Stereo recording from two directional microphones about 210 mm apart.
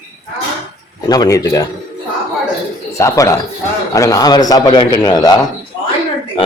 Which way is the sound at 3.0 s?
15° left (ahead or behind).